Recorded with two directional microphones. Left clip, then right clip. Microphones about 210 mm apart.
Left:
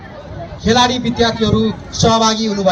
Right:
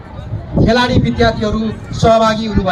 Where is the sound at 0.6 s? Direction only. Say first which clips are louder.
Even; 45° left (ahead or behind).